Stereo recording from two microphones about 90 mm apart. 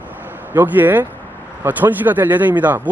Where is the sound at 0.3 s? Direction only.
20° right (ahead or behind).